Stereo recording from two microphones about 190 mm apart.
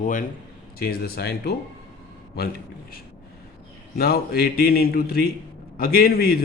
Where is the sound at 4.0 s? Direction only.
55° left (ahead or behind).